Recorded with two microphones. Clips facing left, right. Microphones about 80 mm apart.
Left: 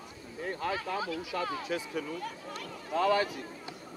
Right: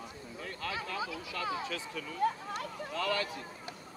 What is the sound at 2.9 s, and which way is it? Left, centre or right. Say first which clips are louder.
Speech: left 7 dB; left.